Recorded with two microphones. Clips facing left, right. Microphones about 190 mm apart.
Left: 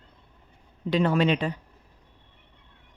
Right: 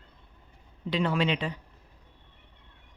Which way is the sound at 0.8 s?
45° left (ahead or behind).